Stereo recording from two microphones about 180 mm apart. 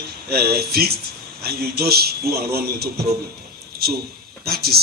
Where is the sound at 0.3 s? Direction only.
60° right (ahead or behind).